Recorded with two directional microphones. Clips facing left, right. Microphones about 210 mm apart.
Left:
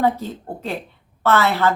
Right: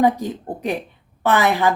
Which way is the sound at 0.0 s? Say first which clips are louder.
Right 3 dB; 15° right (ahead or behind).